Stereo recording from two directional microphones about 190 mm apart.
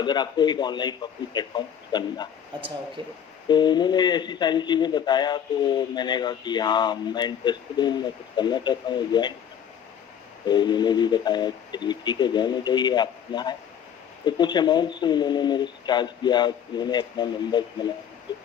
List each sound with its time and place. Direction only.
0.0 s speech: 20° left (ahead or behind)
3.0 s speech: 25° right (ahead or behind)
3.5 s speech: 25° left (ahead or behind)
10.4 s speech: 20° left (ahead or behind)